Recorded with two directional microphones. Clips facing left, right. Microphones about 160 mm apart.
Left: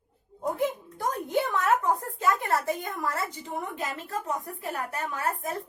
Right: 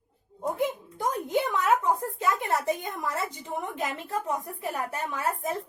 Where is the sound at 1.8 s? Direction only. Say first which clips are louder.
Even; 20° right (ahead or behind).